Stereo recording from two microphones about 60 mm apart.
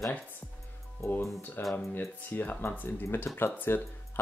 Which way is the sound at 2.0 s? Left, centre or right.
Left.